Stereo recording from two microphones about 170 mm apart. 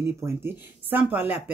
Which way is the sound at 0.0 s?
10° right (ahead or behind).